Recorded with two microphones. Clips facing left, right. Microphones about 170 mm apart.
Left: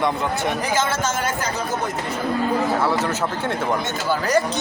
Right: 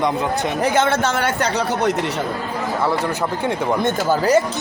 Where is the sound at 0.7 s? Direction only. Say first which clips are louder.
Right 4 dB; 65° right (ahead or behind).